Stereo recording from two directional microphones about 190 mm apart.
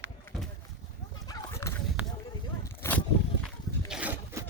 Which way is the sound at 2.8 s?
10° left (ahead or behind).